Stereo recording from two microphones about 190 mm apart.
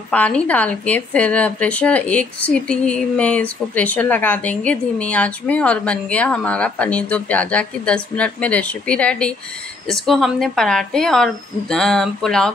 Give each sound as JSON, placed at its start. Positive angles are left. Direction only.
{"t": 0.1, "sound": "a woman's voice", "side_deg": 5}